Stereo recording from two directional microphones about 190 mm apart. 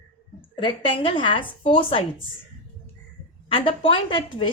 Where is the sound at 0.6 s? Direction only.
25° left (ahead or behind).